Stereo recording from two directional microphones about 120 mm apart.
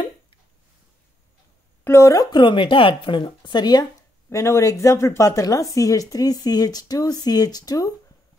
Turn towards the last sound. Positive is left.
turn(degrees=30)  # may be behind; listen again after turning